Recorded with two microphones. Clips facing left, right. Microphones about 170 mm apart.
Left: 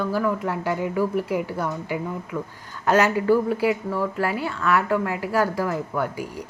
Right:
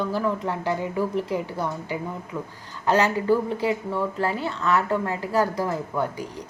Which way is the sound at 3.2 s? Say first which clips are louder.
Left 2 dB; 20° right (ahead or behind).